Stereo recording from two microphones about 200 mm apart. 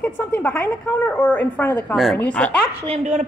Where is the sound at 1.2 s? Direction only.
10° left (ahead or behind).